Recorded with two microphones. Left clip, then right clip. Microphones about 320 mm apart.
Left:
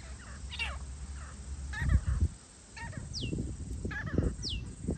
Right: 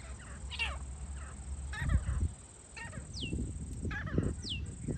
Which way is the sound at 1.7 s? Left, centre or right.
Centre.